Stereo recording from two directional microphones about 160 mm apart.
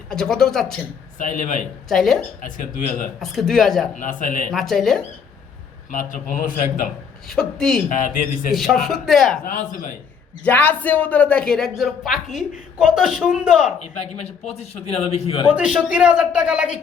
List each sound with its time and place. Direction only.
0.1 s a woman's voice: 5° left (ahead or behind)
1.2 s a man's voice: 50° left (ahead or behind)
1.9 s a woman's voice: centre (ahead or behind)
2.4 s a man's voice: 55° left (ahead or behind)
3.2 s a woman's voice: centre (ahead or behind)
3.9 s a man's voice: 55° left (ahead or behind)
4.5 s a woman's voice: centre (ahead or behind)
5.9 s a man's voice: 55° left (ahead or behind)
7.3 s a woman's voice: 5° left (ahead or behind)
9.4 s a man's voice: 55° left (ahead or behind)
10.4 s a man's voice: 10° left (ahead or behind)
14.0 s a man's voice: 40° left (ahead or behind)
15.4 s a woman's voice: 5° right (ahead or behind)